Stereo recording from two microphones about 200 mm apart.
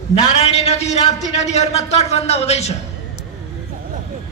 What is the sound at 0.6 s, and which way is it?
Speech, 35° left (ahead or behind).